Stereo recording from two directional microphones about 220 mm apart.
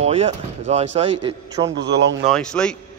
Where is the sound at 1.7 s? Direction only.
55° right (ahead or behind).